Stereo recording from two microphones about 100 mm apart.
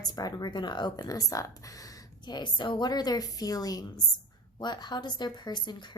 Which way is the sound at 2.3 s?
50° left (ahead or behind).